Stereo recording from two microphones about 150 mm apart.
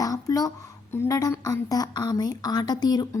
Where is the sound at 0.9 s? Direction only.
20° left (ahead or behind).